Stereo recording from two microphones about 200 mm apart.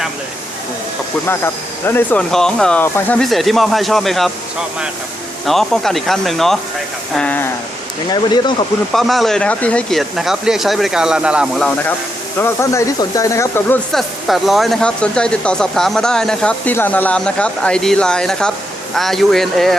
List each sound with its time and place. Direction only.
1.8 s speech: 10° left (ahead or behind)
5.5 s speech: centre (ahead or behind)
8.1 s speech: 20° left (ahead or behind)
8.9 s speech: centre (ahead or behind)
13.9 s speech: centre (ahead or behind)